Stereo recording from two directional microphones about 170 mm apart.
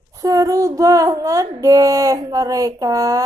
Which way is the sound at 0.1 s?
20° right (ahead or behind).